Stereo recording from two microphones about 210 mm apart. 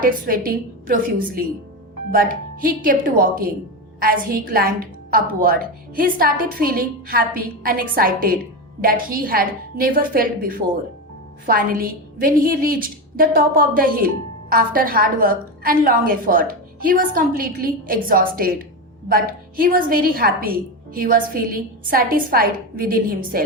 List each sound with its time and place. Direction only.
0.0 s a woman's voice: 40° right (ahead or behind)